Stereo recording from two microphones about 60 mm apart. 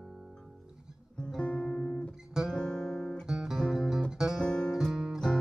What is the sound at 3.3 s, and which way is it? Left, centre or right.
Music, centre.